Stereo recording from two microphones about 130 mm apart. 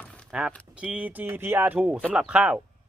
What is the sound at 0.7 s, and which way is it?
Speech, 10° right (ahead or behind).